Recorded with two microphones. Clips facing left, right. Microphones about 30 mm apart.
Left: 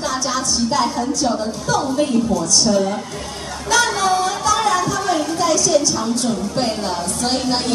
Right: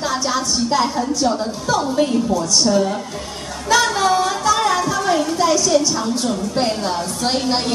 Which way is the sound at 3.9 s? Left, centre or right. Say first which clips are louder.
Right 1 dB; centre.